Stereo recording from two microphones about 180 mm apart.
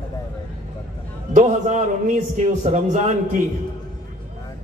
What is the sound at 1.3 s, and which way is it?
A man's voice, 40° right (ahead or behind).